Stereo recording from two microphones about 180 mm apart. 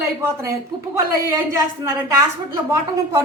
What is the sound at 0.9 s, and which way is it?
A woman's voice, 15° right (ahead or behind).